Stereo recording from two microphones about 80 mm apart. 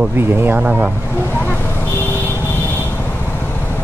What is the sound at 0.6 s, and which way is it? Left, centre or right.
Speech, right.